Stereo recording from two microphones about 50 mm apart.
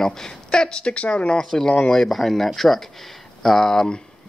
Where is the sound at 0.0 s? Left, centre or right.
Centre.